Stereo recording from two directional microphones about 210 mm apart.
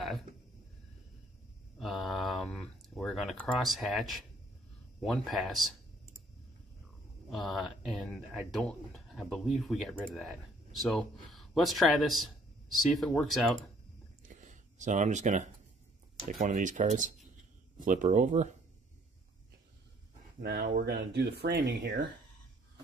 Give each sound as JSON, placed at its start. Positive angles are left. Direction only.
{"t": 1.8, "sound": "a sound", "side_deg": 0}
{"t": 5.0, "sound": "speech", "side_deg": 0}
{"t": 7.2, "sound": "speech", "side_deg": 0}
{"t": 14.2, "sound": "a sound", "side_deg": -35}
{"t": 16.4, "sound": "speech", "side_deg": -35}
{"t": 20.3, "sound": "speech", "side_deg": -55}